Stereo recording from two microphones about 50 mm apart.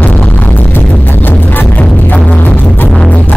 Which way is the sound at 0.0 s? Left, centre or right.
Left.